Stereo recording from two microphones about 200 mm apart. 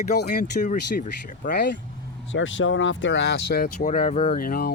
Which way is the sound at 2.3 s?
70° left (ahead or behind).